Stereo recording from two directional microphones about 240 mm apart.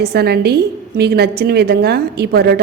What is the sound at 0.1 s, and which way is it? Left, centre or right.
A woman's voice, right.